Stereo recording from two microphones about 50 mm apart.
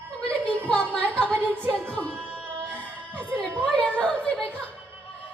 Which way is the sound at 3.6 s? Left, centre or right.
Left.